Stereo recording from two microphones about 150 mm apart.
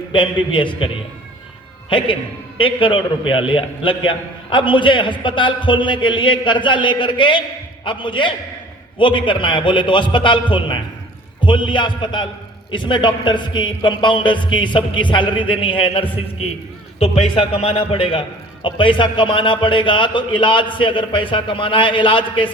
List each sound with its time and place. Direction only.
0.1 s a man's voice: 35° left (ahead or behind)
1.9 s a man's voice: 35° left (ahead or behind)